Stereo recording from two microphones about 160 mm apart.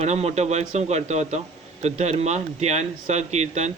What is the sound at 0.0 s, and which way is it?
Speech, 40° right (ahead or behind).